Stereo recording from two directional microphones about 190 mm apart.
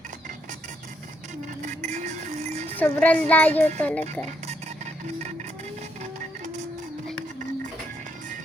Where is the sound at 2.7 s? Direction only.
5° left (ahead or behind).